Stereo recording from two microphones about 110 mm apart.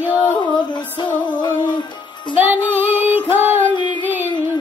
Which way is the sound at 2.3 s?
15° right (ahead or behind).